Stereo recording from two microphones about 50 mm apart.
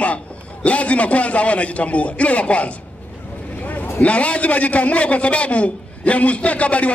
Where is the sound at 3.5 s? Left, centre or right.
Left.